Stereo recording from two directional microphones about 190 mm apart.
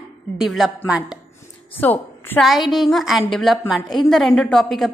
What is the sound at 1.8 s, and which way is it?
A woman's voice, 10° left (ahead or behind).